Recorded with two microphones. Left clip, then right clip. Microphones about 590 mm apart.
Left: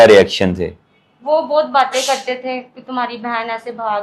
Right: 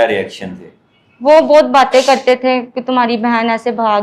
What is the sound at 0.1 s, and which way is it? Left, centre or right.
Speech, left.